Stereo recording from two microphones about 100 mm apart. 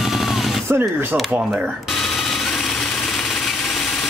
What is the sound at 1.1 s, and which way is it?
Speech, 10° right (ahead or behind).